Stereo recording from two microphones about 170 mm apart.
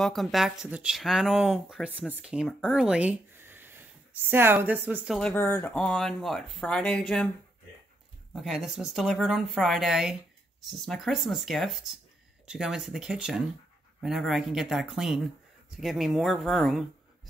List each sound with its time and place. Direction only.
0.0 s speech: centre (ahead or behind)
5.1 s speech: 10° left (ahead or behind)
8.3 s speech: centre (ahead or behind)